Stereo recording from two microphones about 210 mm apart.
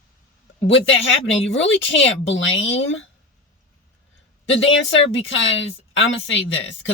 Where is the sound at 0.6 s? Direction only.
60° left (ahead or behind).